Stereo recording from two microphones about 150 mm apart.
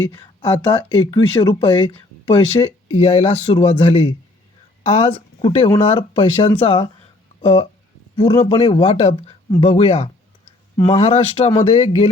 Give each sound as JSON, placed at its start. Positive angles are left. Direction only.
{"t": 0.1, "sound": "speech", "side_deg": 30}
{"t": 2.9, "sound": "speech", "side_deg": 45}